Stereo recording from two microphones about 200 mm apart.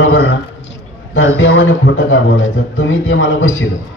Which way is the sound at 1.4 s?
75° left (ahead or behind).